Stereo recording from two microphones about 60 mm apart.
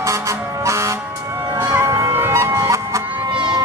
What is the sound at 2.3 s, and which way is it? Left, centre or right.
Music, right.